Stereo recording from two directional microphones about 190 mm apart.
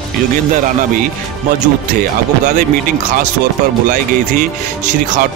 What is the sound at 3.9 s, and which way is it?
Speech, 45° right (ahead or behind).